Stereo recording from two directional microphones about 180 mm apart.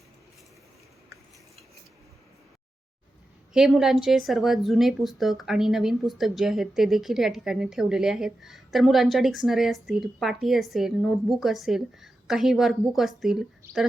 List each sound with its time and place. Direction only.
3.5 s speech: centre (ahead or behind)